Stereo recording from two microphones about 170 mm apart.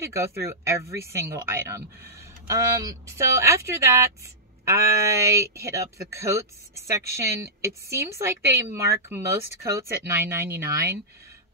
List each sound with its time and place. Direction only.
0.0 s speech: 15° right (ahead or behind)
7.6 s speech: 15° right (ahead or behind)